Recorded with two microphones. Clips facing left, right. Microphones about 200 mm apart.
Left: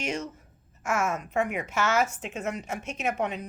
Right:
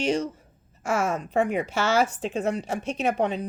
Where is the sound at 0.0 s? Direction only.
30° right (ahead or behind).